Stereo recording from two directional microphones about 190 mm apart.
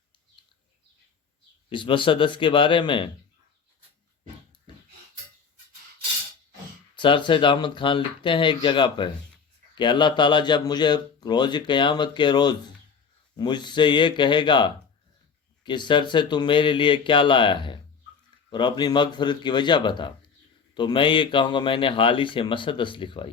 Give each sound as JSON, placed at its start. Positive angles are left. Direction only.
{"t": 1.7, "sound": "a man's voice", "side_deg": 25}
{"t": 6.9, "sound": "a man's voice", "side_deg": 25}